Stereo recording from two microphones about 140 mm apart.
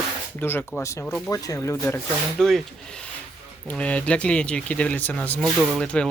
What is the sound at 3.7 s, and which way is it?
Speech, 10° left (ahead or behind).